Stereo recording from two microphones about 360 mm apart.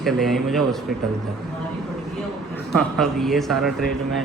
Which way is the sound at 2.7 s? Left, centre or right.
Centre.